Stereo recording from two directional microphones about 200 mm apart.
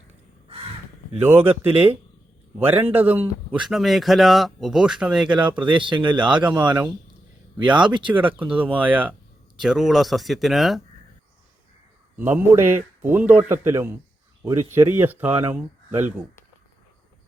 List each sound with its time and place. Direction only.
1.1 s a man's voice: 10° right (ahead or behind)
2.8 s a man's voice: 10° right (ahead or behind)
5.3 s speech: 25° right (ahead or behind)
7.8 s speech: 25° right (ahead or behind)
8.1 s a man's voice: 10° right (ahead or behind)
12.1 s a man's voice: 10° right (ahead or behind)